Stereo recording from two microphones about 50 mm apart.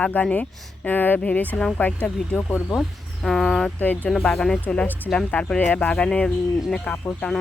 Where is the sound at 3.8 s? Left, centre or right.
Left.